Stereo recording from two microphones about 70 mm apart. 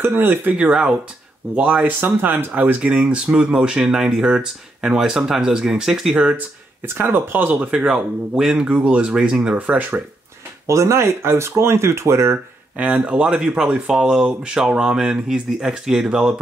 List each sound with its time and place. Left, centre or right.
0.0 s speech: right
0.7 s speech: centre
1.5 s speech: right
6.9 s speech: right
7.6 s speech: centre
10.7 s speech: right
12.7 s speech: centre